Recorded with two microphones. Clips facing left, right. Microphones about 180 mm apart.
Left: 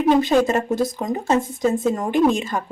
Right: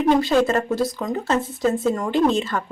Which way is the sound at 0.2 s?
20° left (ahead or behind).